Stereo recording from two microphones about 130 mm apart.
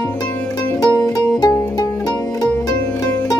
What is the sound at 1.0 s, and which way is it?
Music, 25° left (ahead or behind).